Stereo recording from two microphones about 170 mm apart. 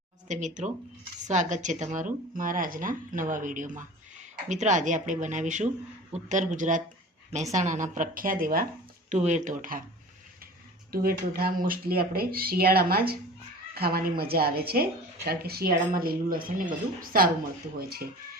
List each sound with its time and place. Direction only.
0.3 s speech: 45° right (ahead or behind)
9.0 s speech: 45° right (ahead or behind)
10.9 s speech: 60° right (ahead or behind)